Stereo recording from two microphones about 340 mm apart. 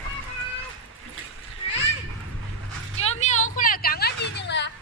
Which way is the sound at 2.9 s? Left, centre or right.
Centre.